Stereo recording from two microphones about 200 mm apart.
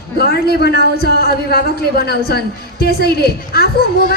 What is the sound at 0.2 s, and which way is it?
A woman's voice, 50° left (ahead or behind).